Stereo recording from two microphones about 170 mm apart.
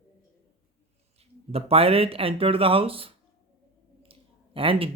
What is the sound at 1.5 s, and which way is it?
A man's voice, 35° right (ahead or behind).